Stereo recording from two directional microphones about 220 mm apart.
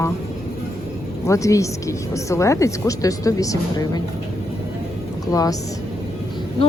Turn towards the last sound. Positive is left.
turn(degrees=15)  # may be behind; listen again after turning